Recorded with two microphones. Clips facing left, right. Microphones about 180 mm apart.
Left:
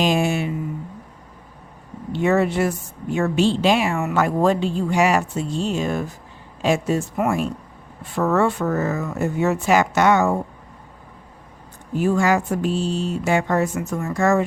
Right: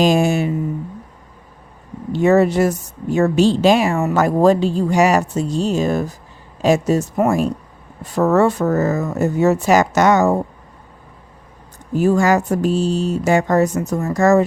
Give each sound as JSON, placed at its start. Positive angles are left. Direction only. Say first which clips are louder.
{"t": 0.0, "sound": "a woman's voice", "louder": "right 5 dB", "side_deg": -40}
{"t": 2.1, "sound": "a woman's voice", "louder": "right 5 dB", "side_deg": -40}
{"t": 11.9, "sound": "a woman's voice", "louder": "right 4 dB", "side_deg": -40}